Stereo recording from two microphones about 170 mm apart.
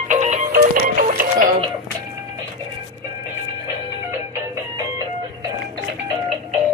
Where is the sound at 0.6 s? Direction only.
60° right (ahead or behind).